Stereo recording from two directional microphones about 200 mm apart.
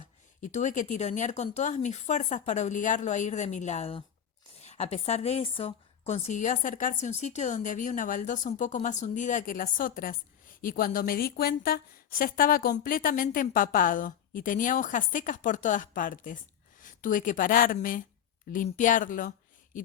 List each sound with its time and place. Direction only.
0.4 s a woman's voice: 40° left (ahead or behind)